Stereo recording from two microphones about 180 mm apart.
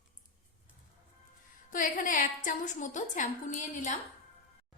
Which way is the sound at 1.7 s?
50° left (ahead or behind).